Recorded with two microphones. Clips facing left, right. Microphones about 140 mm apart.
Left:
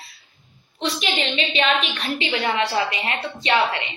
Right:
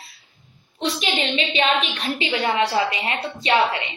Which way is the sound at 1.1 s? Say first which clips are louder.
Right 1 dB; 30° right (ahead or behind).